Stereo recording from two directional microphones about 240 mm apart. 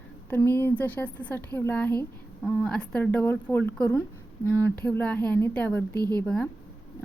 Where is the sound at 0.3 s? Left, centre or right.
Centre.